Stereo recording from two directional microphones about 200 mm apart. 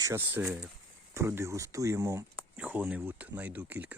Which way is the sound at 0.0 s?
10° right (ahead or behind).